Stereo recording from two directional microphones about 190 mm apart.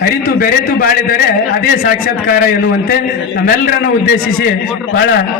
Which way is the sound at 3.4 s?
60° left (ahead or behind).